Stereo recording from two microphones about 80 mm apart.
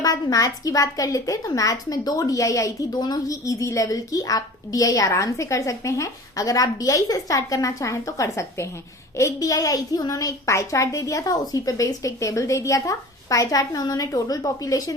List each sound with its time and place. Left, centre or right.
0.0 s a woman's voice: left